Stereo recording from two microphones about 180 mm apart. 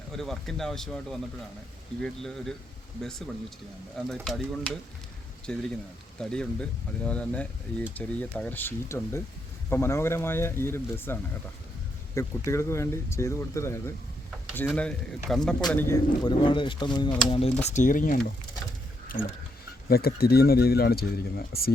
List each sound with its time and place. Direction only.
0.2 s speech: centre (ahead or behind)
16.2 s speech: 25° left (ahead or behind)
17.3 s speech: 35° left (ahead or behind)
19.9 s speech: 60° left (ahead or behind)